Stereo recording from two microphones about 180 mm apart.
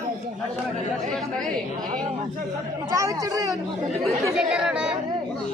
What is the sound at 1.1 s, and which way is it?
Speech, centre (ahead or behind).